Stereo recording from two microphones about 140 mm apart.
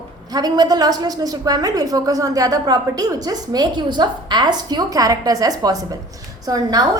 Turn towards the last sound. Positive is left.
turn(degrees=-25)  # may be behind; listen again after turning